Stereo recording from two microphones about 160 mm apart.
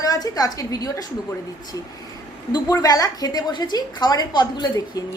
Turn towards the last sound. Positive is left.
turn(degrees=25)  # may be behind; listen again after turning